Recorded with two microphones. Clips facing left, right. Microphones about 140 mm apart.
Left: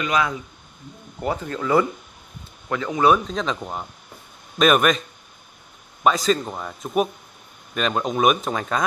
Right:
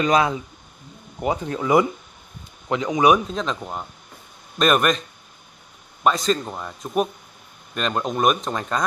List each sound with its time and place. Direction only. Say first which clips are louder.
0.0 s speech: right 4 dB; 30° right (ahead or behind)
1.2 s speech: right 2 dB; 15° right (ahead or behind)
3.3 s speech: left 1 dB; centre (ahead or behind)
6.0 s speech: left 1 dB; centre (ahead or behind)